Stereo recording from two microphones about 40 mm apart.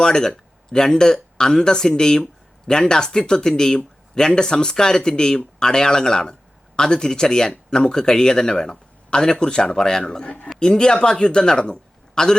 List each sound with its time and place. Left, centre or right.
0.0 s speech: centre
10.2 s a man's voice: left